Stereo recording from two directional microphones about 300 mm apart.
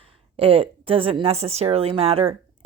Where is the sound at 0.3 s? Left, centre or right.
Centre.